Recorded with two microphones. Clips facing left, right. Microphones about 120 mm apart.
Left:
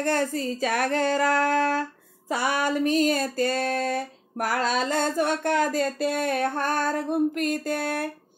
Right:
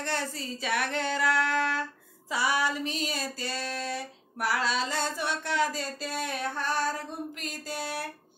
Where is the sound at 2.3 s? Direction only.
55° left (ahead or behind).